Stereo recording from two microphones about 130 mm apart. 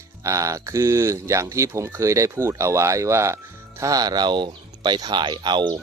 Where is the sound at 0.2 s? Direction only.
25° right (ahead or behind).